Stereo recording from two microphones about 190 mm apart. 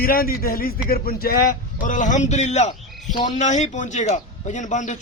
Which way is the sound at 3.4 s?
40° left (ahead or behind).